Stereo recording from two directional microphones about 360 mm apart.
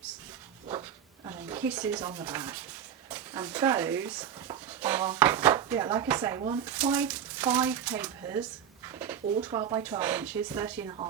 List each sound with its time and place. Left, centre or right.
0.7 s stir: centre
3.1 s speech: centre